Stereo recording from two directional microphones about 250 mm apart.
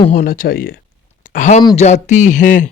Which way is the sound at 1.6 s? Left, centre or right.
Centre.